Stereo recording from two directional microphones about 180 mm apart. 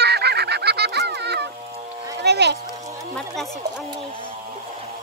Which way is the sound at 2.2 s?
70° right (ahead or behind).